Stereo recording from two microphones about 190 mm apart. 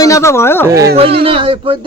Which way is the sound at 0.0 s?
15° left (ahead or behind).